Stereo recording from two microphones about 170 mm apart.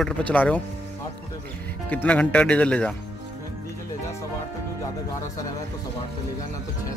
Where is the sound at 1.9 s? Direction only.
10° left (ahead or behind).